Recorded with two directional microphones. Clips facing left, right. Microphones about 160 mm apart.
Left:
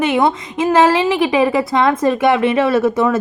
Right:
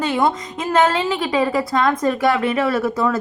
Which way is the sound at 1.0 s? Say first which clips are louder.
Left 6 dB; 90° left.